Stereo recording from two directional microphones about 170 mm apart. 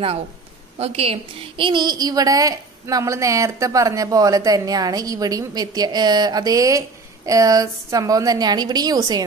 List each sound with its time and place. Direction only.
0.7 s a woman's voice: 35° right (ahead or behind)